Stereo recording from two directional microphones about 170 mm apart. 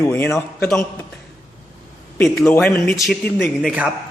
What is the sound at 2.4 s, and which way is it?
A man's voice, 10° left (ahead or behind).